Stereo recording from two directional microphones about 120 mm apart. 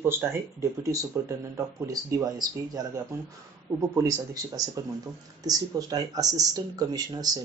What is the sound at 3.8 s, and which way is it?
Speech, 30° right (ahead or behind).